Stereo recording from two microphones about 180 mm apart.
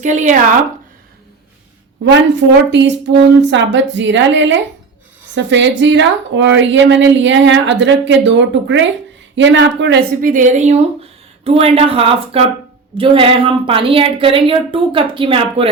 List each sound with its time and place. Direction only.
0.0 s speech: 45° right (ahead or behind)
2.0 s a woman's voice: 75° right (ahead or behind)
10.2 s a woman's voice: 50° right (ahead or behind); by 15.7 s 30° right (ahead or behind)